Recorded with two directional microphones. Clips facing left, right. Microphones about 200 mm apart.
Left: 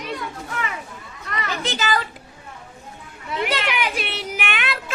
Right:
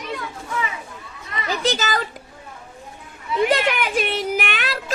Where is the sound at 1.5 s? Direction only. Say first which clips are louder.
Right 3 dB; 40° right (ahead or behind).